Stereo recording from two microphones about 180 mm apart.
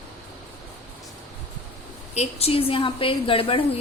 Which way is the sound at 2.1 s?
35° left (ahead or behind).